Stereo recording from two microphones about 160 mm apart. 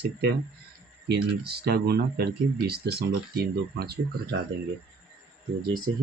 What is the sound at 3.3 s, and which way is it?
Speech, 80° right.